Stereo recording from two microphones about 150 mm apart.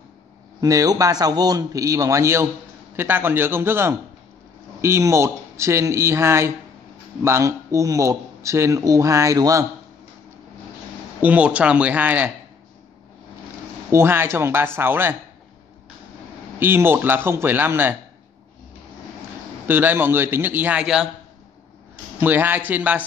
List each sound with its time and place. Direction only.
0.6 s a man's voice: 25° right (ahead or behind)
11.1 s speech: 10° right (ahead or behind)
13.9 s speech: 15° right (ahead or behind)
16.5 s speech: 15° right (ahead or behind)
19.7 s speech: 15° right (ahead or behind)
22.2 s speech: 10° right (ahead or behind)